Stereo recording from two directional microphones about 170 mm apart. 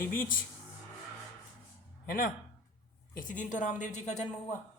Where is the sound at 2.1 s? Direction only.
55° left (ahead or behind).